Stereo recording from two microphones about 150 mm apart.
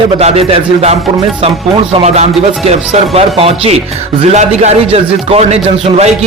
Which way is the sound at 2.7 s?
45° right (ahead or behind).